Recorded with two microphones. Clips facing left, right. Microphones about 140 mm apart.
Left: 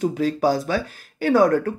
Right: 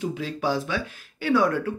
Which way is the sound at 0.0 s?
45° left (ahead or behind).